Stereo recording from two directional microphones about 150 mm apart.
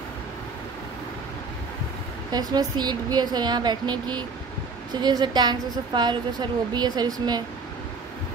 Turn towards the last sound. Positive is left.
turn(degrees=-25)  # may be behind; listen again after turning